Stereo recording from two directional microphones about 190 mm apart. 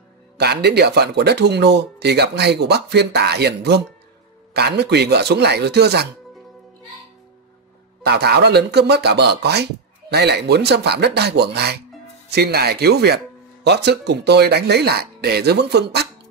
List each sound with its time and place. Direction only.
0.4 s speech: 60° right (ahead or behind)
8.0 s speech: 60° right (ahead or behind)